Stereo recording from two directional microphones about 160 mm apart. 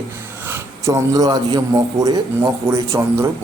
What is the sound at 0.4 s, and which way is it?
A man's voice, 15° right (ahead or behind).